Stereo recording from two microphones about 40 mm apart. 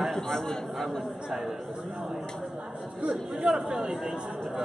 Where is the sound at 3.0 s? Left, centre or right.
Centre.